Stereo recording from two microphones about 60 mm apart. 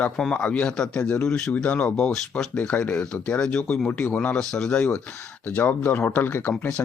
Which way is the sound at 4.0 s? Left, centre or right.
Left.